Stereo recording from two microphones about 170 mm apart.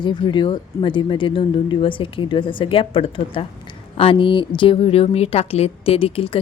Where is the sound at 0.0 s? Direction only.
25° left (ahead or behind).